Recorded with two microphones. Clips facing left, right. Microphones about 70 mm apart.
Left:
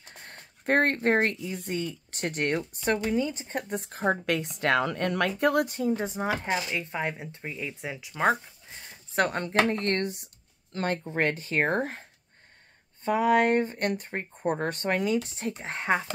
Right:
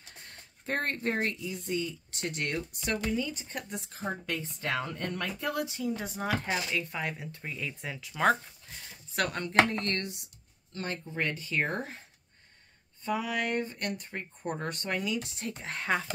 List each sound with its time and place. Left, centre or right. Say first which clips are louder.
0.2 s speech: left 7 dB; left
6.0 s speech: left 3 dB; left
8.6 s speech: left 2 dB; left
11.4 s speech: left 6 dB; left
13.0 s speech: left 9 dB; left